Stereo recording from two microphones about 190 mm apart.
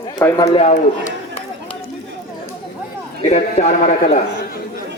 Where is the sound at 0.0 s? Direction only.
20° left (ahead or behind).